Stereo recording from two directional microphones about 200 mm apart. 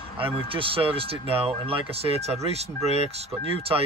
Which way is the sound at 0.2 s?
25° right (ahead or behind).